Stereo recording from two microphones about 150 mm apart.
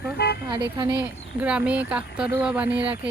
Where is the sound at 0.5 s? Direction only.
30° right (ahead or behind).